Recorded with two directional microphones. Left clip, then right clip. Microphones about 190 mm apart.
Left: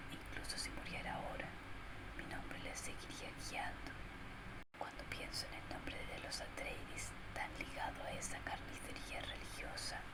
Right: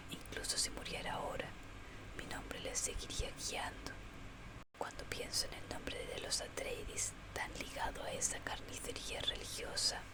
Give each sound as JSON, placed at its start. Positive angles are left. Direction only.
{"t": 0.4, "sound": "whispering", "side_deg": -70}
{"t": 5.0, "sound": "whispering", "side_deg": -65}